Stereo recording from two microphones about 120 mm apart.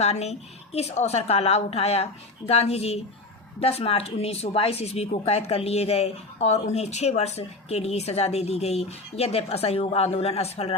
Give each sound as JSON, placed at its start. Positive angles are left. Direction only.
{"t": 0.0, "sound": "speech", "side_deg": 60}